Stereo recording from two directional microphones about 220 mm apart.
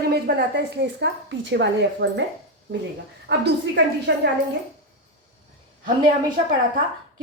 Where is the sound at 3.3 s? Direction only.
50° right (ahead or behind).